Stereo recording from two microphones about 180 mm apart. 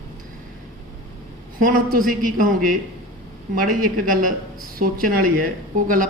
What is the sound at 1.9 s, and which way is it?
Speech, 50° right (ahead or behind).